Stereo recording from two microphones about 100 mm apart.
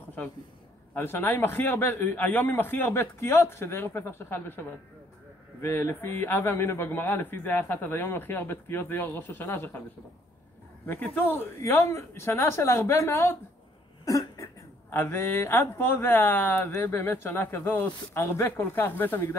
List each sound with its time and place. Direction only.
0.9 s speech: 20° left (ahead or behind)
10.9 s speech: 20° left (ahead or behind)
14.0 s cough: 30° left (ahead or behind)
14.9 s speech: 20° left (ahead or behind)